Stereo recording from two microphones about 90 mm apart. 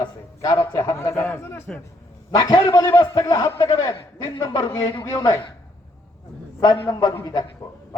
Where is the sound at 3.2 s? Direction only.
40° left (ahead or behind).